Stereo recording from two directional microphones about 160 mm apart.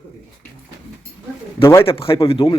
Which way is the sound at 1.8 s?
35° left (ahead or behind).